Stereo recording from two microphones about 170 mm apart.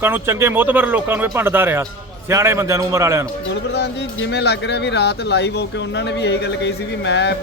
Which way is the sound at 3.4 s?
75° left (ahead or behind).